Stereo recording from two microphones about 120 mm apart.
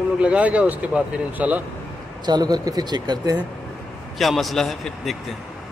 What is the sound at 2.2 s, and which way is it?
Speech, 35° right (ahead or behind).